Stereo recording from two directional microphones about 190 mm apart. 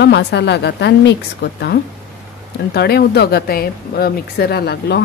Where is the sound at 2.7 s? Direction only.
60° left (ahead or behind).